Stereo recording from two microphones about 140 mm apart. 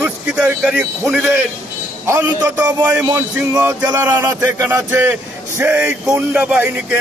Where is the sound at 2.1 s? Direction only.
15° right (ahead or behind).